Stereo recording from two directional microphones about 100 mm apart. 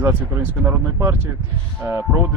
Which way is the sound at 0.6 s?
25° right (ahead or behind).